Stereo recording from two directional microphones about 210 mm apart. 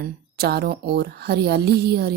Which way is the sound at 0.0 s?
50° right (ahead or behind).